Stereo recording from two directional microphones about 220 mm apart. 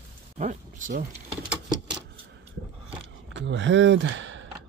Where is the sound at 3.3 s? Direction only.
55° right (ahead or behind).